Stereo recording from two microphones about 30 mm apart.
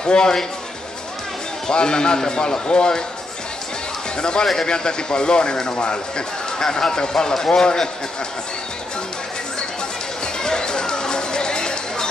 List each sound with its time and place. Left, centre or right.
0.0 s a man's voice: left
1.7 s speech: left
4.2 s speech: left
10.2 s music: left